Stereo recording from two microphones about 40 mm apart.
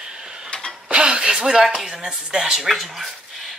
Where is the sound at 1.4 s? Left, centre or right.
Centre.